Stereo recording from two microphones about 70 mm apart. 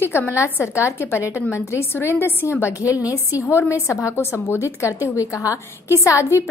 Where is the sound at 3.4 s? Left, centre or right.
Left.